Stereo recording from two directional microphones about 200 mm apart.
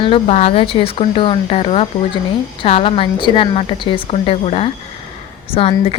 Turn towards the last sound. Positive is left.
turn(degrees=30)  # may be behind; listen again after turning